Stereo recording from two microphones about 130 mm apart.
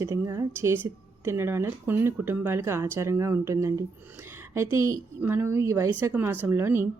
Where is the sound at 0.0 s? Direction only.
25° right (ahead or behind).